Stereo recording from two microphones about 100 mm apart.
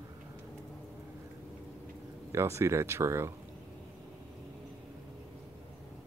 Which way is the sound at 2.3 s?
25° right (ahead or behind).